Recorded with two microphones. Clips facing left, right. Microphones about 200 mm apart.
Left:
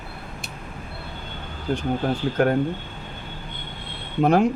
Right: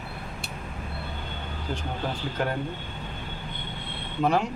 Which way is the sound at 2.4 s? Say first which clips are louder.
Left 9 dB; 60° left (ahead or behind).